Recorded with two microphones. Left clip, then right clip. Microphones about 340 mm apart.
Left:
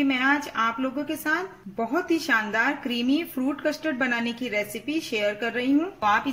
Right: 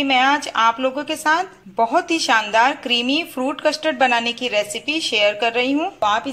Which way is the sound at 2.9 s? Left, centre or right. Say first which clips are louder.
Right 7 dB; right.